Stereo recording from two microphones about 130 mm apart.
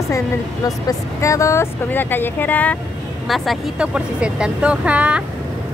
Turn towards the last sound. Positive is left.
turn(degrees=-10)  # may be behind; listen again after turning